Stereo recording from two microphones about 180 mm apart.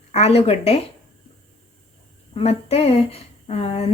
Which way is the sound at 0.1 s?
35° left (ahead or behind).